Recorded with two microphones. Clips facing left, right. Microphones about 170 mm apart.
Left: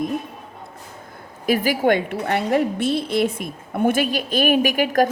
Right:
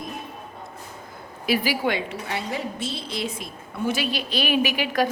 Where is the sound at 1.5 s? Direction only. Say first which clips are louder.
Left 5 dB; 45° left (ahead or behind).